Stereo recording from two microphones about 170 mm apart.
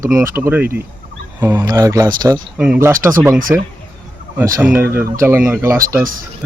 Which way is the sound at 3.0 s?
10° right (ahead or behind).